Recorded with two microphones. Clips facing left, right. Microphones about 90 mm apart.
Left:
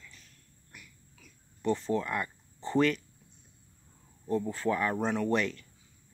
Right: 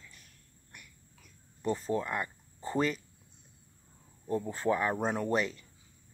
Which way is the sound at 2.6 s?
35° right (ahead or behind).